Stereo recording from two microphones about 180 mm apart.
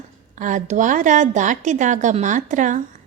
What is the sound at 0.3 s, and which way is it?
A woman's voice, 45° right (ahead or behind).